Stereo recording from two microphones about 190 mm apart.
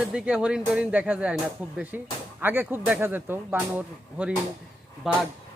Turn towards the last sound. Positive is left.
turn(degrees=0)  # may be behind; listen again after turning